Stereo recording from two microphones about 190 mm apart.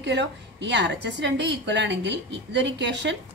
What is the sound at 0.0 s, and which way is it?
A woman's voice, 65° right (ahead or behind).